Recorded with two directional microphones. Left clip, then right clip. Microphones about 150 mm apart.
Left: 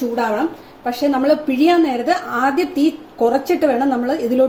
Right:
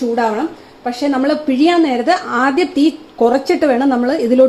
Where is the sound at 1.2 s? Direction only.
40° right (ahead or behind).